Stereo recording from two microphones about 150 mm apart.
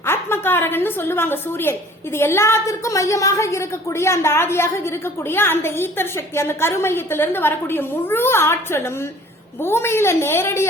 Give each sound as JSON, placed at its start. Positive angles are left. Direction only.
{"t": 0.0, "sound": "a woman's voice", "side_deg": 15}